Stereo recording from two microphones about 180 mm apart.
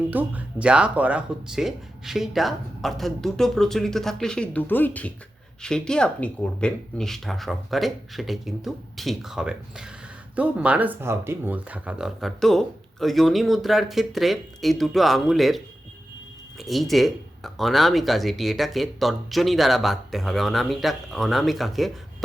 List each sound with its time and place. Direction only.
0.1 s speech: 10° right (ahead or behind)